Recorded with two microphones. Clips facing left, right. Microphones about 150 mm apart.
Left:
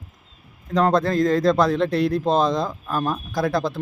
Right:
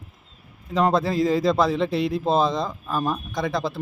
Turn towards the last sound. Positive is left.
turn(degrees=0)  # may be behind; listen again after turning